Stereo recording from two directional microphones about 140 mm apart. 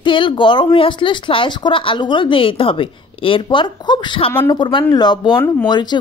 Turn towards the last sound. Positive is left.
turn(degrees=30)  # may be behind; listen again after turning